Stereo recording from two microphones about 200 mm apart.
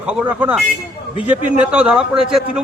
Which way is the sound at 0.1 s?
5° right (ahead or behind).